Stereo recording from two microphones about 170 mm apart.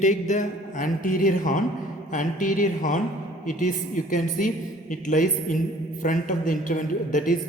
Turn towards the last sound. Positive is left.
turn(degrees=50)  # may be behind; listen again after turning